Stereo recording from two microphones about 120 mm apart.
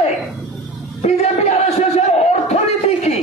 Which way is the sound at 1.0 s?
65° left (ahead or behind).